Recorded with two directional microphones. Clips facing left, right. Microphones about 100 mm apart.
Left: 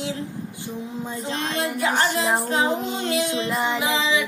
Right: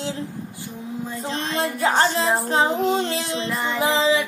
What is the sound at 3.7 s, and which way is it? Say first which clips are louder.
Music: right 3 dB; 25° right (ahead or behind).